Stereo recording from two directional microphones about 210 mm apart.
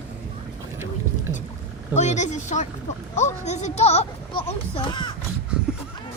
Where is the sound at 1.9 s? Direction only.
35° left (ahead or behind).